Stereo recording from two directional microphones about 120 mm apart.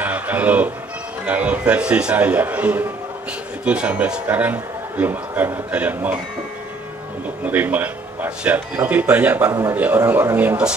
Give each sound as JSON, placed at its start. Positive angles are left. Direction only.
{"t": 0.0, "sound": "music", "side_deg": -15}
{"t": 1.2, "sound": "a man's voice", "side_deg": -10}
{"t": 7.4, "sound": "a man's voice", "side_deg": -15}
{"t": 9.5, "sound": "a man's voice", "side_deg": -25}